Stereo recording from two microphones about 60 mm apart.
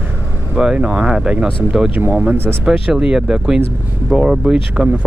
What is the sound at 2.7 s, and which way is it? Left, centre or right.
Speech, centre.